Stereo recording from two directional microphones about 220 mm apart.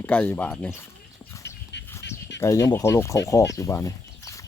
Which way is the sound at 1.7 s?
55° left (ahead or behind).